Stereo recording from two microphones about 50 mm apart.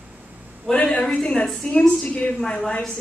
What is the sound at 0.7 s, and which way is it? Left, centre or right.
Speech, centre.